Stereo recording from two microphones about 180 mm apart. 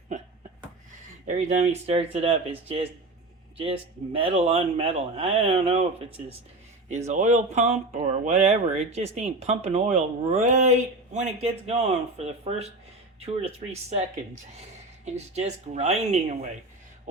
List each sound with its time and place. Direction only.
1.3 s speech: 40° right (ahead or behind)
15.0 s speech: 40° right (ahead or behind)